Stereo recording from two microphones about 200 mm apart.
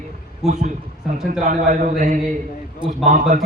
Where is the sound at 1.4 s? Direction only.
45° right (ahead or behind).